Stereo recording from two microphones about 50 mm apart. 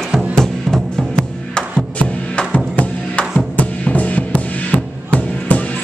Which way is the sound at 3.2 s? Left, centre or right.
Centre.